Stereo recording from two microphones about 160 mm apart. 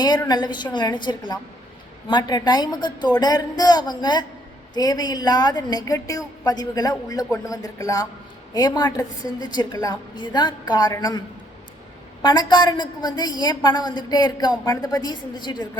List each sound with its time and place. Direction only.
0.0 s a woman's voice: 25° left (ahead or behind)
12.2 s a woman's voice: 25° left (ahead or behind)